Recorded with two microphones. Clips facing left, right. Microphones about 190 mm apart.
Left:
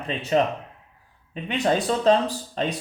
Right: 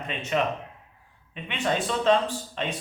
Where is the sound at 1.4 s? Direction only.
40° left (ahead or behind).